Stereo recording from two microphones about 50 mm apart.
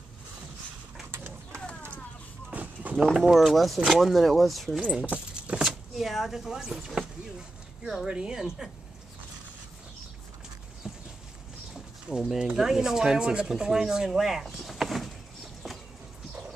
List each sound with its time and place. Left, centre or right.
1.1 s bird: right
2.5 s a sound: right
3.0 s speech: centre
3.3 s speech: centre
5.1 s speech: centre
10.8 s clip-clop: centre
11.7 s speech: centre
14.4 s a sound: centre